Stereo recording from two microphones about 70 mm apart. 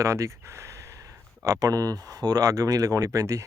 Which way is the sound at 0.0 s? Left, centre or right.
Right.